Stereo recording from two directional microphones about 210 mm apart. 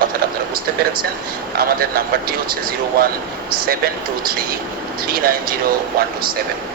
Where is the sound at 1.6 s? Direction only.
45° right (ahead or behind).